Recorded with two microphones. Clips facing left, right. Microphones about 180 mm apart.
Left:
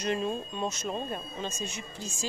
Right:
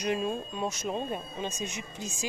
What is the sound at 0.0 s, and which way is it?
Speech, 10° right (ahead or behind).